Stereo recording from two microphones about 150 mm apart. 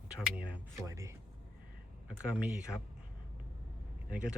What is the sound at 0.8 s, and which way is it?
Speech, 20° right (ahead or behind).